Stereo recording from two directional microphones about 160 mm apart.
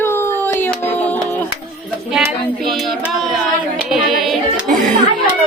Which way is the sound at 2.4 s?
Centre (ahead or behind).